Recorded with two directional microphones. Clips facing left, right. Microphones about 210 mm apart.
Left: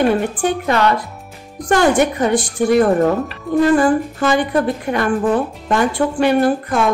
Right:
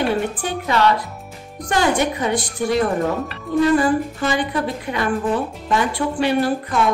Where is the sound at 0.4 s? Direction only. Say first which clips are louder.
Left 3 dB; 50° left (ahead or behind).